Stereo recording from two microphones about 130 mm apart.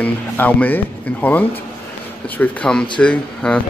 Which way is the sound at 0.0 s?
10° left (ahead or behind).